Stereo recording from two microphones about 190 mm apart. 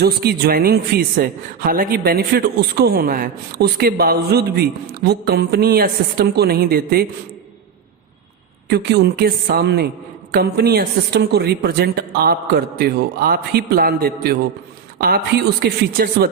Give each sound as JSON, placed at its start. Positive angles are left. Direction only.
{"t": 0.0, "sound": "a man's voice", "side_deg": -55}
{"t": 8.7, "sound": "a man's voice", "side_deg": -60}